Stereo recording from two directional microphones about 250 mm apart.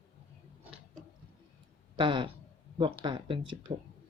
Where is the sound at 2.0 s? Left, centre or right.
Centre.